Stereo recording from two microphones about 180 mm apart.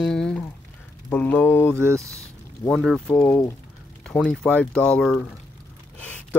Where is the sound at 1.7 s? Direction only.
15° right (ahead or behind).